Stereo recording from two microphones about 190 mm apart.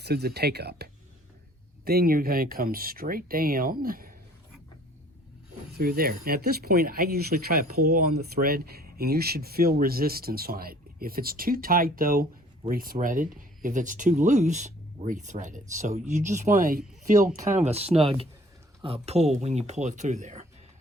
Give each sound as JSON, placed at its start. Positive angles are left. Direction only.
{"t": 0.0, "sound": "speech", "side_deg": -60}
{"t": 5.7, "sound": "speech", "side_deg": -50}